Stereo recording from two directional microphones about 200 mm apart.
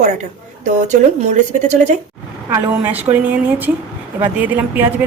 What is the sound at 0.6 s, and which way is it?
Speech, 40° right (ahead or behind).